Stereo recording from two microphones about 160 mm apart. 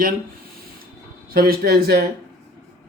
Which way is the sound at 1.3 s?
65° right (ahead or behind).